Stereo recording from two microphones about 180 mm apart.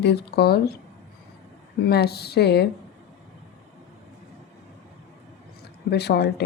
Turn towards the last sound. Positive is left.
turn(degrees=65)  # may be behind; listen again after turning